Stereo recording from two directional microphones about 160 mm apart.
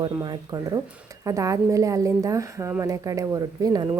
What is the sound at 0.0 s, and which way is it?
A woman's voice, 25° right (ahead or behind).